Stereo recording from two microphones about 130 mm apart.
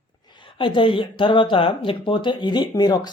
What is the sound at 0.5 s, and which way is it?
Speech, 40° left (ahead or behind).